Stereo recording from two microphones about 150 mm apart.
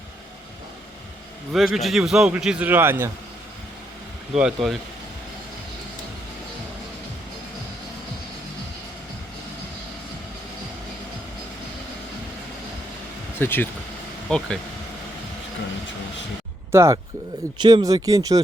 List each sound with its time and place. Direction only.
1.5 s a man's voice: centre (ahead or behind)
4.4 s a man's voice: centre (ahead or behind)
13.4 s a man's voice: 15° left (ahead or behind)
16.7 s speech: 20° right (ahead or behind)
17.6 s speech: 30° right (ahead or behind)